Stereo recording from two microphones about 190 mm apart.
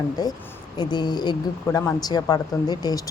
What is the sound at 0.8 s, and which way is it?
Speech, 20° left (ahead or behind).